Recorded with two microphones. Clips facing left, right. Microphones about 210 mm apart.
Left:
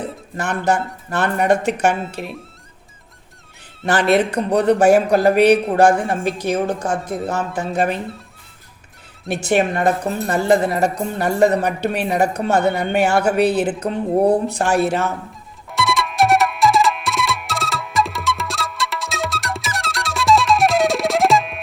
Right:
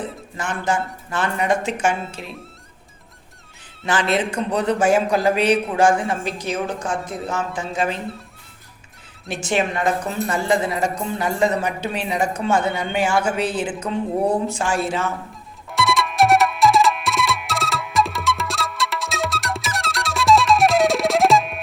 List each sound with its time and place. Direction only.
0.3 s speech: 65° left (ahead or behind)
3.8 s speech: 60° left (ahead or behind)
7.3 s speech: 60° left (ahead or behind)
9.3 s speech: 60° left (ahead or behind)
15.7 s music: centre (ahead or behind)